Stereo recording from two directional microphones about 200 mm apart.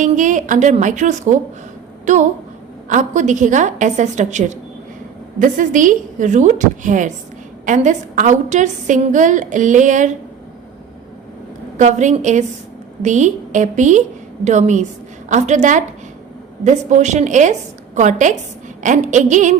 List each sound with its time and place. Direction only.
0.0 s a woman's voice: 40° right (ahead or behind)
11.8 s a woman's voice: 35° right (ahead or behind)